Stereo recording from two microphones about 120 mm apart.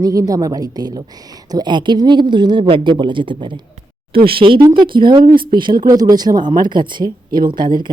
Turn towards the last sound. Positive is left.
turn(degrees=-40)  # may be behind; listen again after turning